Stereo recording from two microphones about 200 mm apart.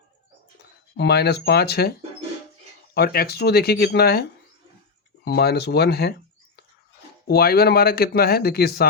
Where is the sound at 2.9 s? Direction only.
50° left (ahead or behind).